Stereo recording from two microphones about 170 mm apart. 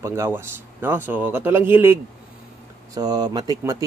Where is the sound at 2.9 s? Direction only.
25° right (ahead or behind).